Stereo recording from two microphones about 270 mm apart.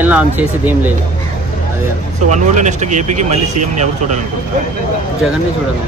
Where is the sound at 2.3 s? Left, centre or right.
Right.